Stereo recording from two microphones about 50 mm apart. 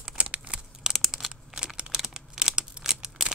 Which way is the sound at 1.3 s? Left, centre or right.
Centre.